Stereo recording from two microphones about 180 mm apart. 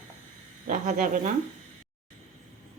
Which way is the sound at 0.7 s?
45° right (ahead or behind).